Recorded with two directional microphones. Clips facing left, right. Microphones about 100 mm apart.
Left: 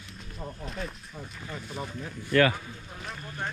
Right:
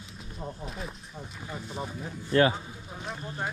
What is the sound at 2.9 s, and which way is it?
Vehicle, 5° right (ahead or behind).